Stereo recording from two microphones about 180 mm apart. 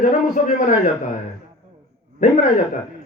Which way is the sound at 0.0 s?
45° left (ahead or behind).